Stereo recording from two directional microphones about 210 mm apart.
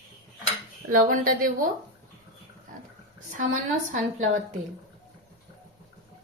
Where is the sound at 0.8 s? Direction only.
40° right (ahead or behind).